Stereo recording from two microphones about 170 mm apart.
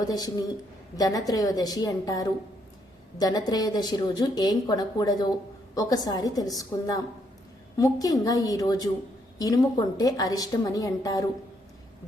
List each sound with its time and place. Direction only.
0.0 s a woman's voice: 20° left (ahead or behind)